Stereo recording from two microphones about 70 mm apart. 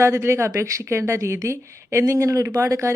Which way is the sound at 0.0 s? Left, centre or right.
Right.